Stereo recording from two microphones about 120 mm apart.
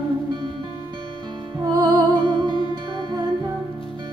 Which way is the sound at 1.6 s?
35° right (ahead or behind).